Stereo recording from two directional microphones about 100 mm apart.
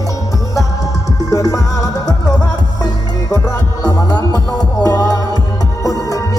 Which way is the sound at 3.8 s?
45° left (ahead or behind).